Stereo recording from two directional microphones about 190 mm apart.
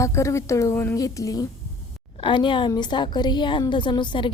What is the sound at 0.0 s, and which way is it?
A woman's voice, 15° left (ahead or behind).